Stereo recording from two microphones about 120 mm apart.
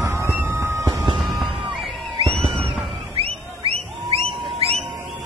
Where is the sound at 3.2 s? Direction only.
50° right (ahead or behind).